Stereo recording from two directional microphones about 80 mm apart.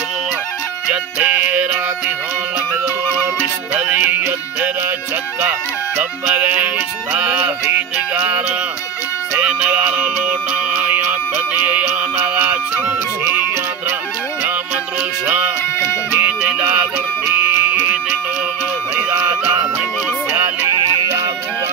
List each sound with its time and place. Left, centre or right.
0.8 s music: centre
3.7 s music: right
6.2 s music: centre
15.2 s music: right
20.6 s music: right